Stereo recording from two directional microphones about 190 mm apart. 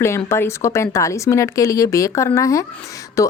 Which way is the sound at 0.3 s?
15° left (ahead or behind).